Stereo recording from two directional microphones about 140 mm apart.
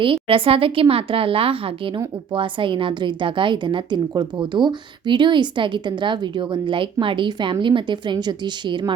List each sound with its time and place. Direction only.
0.0 s a woman's voice: 40° right (ahead or behind)